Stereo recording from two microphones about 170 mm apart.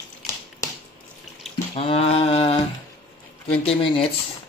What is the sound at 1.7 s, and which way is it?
Speech, 35° left (ahead or behind).